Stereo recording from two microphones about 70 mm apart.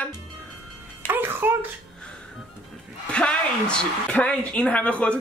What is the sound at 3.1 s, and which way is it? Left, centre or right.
Speech, centre.